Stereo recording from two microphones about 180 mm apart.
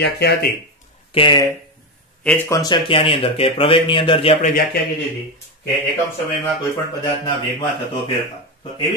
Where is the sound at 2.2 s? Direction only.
5° left (ahead or behind).